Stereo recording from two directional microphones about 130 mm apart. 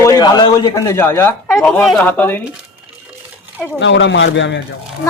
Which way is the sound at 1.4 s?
5° left (ahead or behind).